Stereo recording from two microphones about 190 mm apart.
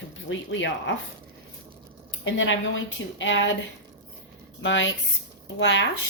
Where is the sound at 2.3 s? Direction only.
90° left.